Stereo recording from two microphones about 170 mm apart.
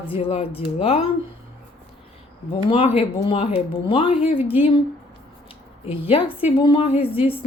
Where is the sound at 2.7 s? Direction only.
35° left (ahead or behind).